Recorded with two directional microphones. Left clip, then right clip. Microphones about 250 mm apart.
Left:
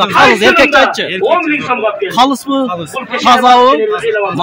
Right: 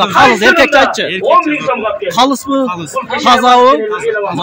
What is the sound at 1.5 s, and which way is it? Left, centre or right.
Speech, left.